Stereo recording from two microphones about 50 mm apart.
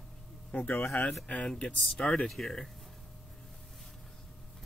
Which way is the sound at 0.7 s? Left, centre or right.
Left.